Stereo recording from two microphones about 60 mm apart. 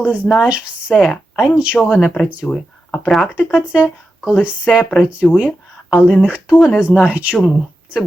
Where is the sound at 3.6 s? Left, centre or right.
Right.